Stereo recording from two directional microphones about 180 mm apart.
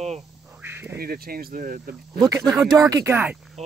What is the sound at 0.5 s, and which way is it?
Speech, 10° right (ahead or behind).